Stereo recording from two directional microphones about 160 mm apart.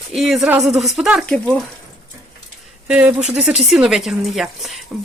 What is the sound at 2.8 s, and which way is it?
Speech, 5° right (ahead or behind).